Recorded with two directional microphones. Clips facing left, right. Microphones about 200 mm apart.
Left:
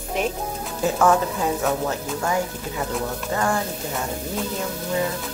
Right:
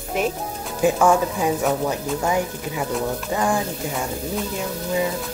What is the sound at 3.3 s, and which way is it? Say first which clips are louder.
Speech: right 1 dB; 15° right (ahead or behind).